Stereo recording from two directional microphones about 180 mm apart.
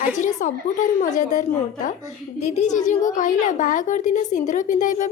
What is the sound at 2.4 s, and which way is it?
A woman's voice, 40° left (ahead or behind).